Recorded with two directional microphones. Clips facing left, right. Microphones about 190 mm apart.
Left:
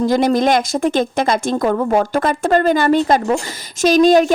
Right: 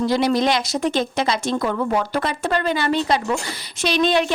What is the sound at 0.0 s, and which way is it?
A woman's voice, 45° left (ahead or behind).